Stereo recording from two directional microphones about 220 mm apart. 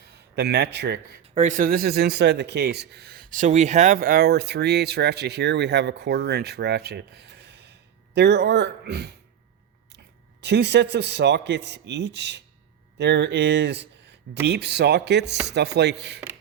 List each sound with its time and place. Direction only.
0.3 s speech: 50° right (ahead or behind)
1.4 s speech: 35° right (ahead or behind)
10.4 s speech: 50° right (ahead or behind)